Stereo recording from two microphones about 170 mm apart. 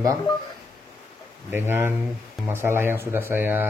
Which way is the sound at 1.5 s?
15° right (ahead or behind).